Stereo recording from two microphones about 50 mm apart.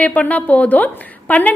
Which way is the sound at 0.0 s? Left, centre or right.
Left.